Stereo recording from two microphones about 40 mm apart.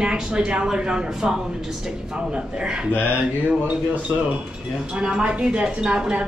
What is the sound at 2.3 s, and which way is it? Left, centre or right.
Speech, right.